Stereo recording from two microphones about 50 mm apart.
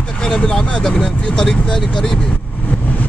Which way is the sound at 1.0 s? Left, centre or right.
Centre.